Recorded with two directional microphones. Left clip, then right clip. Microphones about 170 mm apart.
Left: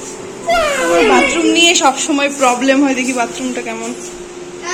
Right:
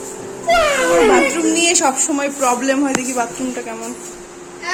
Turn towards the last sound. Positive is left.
turn(degrees=-5)  # may be behind; listen again after turning